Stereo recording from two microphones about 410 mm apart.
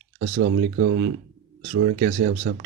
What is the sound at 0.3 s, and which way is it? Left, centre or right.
Speech, right.